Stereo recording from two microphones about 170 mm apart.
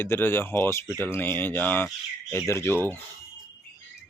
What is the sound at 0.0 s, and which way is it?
Speech, 15° left (ahead or behind).